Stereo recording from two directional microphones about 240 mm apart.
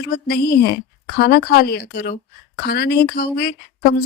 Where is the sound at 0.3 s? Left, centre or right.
Left.